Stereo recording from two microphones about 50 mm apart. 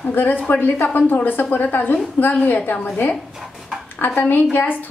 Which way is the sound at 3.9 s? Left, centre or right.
Left.